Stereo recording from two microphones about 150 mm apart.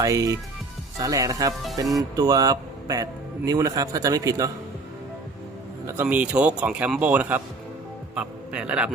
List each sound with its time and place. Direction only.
0.0 s a man's voice: 20° right (ahead or behind)
5.8 s a man's voice: 15° right (ahead or behind)